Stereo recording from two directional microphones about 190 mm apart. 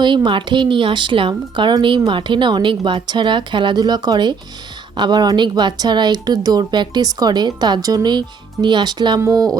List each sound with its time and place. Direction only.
0.0 s speech: 25° right (ahead or behind)